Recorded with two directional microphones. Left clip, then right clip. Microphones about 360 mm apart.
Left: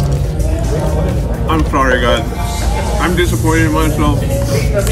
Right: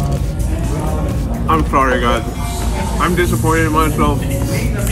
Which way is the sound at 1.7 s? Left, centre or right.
Left.